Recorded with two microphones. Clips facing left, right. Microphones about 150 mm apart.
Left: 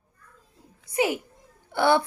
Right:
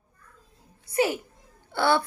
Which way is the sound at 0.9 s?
20° left (ahead or behind).